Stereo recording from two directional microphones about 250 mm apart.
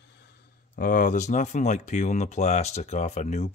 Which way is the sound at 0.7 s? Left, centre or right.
Left.